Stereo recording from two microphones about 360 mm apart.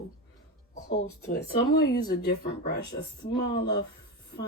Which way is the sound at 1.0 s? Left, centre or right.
Left.